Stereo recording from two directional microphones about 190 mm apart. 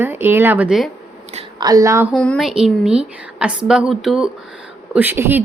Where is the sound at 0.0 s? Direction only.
10° right (ahead or behind).